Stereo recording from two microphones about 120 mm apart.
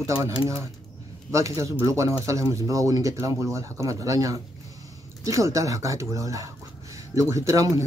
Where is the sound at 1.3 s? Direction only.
25° right (ahead or behind).